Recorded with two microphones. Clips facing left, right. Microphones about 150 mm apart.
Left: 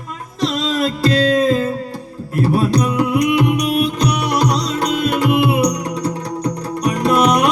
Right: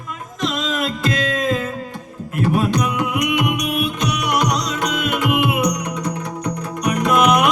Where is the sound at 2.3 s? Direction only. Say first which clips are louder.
Left 3 dB; 35° left (ahead or behind).